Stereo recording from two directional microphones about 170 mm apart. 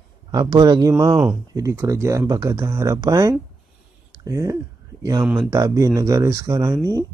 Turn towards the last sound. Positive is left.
turn(degrees=-20)  # may be behind; listen again after turning